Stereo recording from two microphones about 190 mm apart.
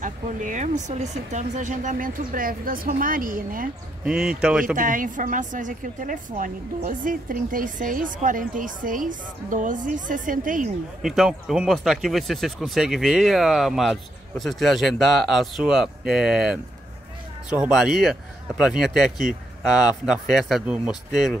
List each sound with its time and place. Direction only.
0.0 s a woman's voice: 40° right (ahead or behind)
4.0 s speech: 5° right (ahead or behind)
4.7 s a woman's voice: 45° right (ahead or behind)
11.0 s speech: centre (ahead or behind)
17.7 s speech: centre (ahead or behind)